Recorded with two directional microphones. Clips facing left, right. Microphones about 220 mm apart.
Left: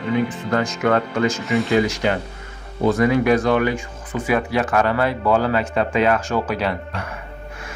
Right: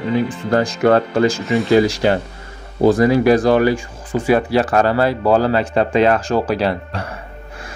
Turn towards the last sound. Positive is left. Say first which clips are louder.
# right 4 dB
turn(degrees=-35)  # may be behind; listen again after turning